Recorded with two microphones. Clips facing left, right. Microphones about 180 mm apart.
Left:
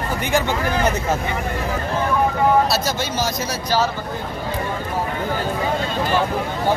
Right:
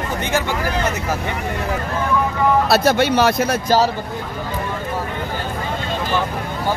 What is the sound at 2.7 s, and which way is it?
Speech, 60° right (ahead or behind).